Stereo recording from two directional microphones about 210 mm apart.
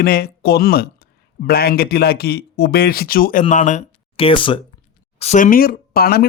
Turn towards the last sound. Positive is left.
turn(degrees=45)  # may be behind; listen again after turning